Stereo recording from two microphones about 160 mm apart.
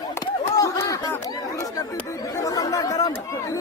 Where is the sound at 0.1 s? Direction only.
20° left (ahead or behind).